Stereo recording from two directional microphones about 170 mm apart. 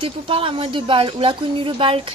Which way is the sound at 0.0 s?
30° right (ahead or behind).